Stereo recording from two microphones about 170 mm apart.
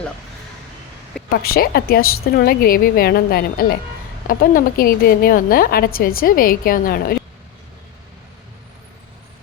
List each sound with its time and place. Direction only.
1.3 s a woman's voice: 65° left (ahead or behind)